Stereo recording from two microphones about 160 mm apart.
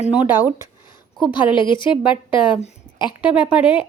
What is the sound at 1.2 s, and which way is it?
A woman's voice, 30° left (ahead or behind).